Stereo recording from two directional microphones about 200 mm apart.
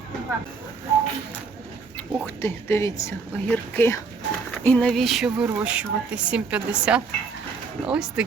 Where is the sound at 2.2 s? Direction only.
10° left (ahead or behind).